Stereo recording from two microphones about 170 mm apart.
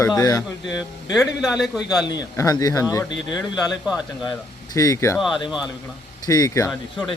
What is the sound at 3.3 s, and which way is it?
Speech, centre (ahead or behind).